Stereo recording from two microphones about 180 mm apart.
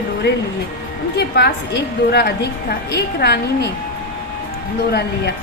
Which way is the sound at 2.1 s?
65° left (ahead or behind).